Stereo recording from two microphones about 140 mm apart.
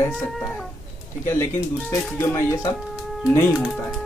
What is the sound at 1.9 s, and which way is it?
Speech, 20° left (ahead or behind).